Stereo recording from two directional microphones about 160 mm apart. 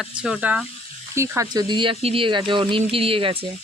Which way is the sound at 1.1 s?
20° right (ahead or behind).